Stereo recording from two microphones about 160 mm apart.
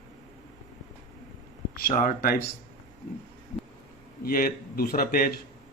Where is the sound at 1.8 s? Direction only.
60° left (ahead or behind).